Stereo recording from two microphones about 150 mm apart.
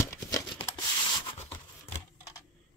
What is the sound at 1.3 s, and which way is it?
Rub, 15° left (ahead or behind).